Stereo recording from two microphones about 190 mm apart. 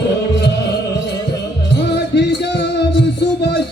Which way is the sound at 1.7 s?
60° left (ahead or behind).